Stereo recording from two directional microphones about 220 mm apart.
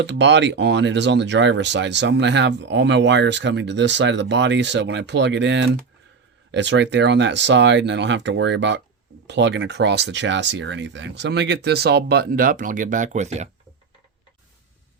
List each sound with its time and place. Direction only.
0.0 s speech: 55° right (ahead or behind); by 13.5 s 30° right (ahead or behind)